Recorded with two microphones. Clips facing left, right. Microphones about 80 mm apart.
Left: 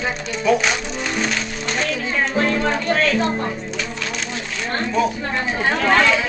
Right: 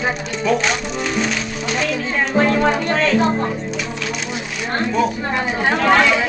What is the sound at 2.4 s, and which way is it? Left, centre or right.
Speech, right.